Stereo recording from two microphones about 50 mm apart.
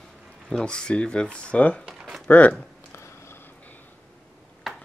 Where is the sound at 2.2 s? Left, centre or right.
Left.